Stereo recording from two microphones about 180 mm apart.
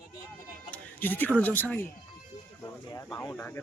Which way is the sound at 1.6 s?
10° left (ahead or behind).